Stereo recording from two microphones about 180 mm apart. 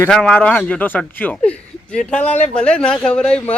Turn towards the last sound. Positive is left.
turn(degrees=5)  # may be behind; listen again after turning